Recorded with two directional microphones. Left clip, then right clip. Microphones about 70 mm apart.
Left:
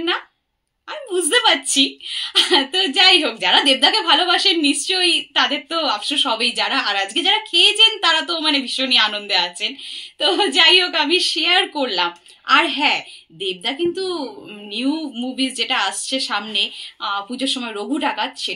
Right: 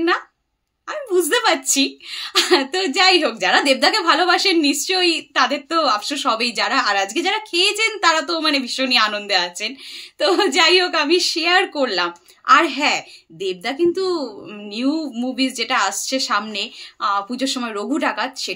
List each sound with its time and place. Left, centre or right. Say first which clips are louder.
0.8 s a woman's voice: right 3 dB; right
16.5 s speech: left 5 dB; right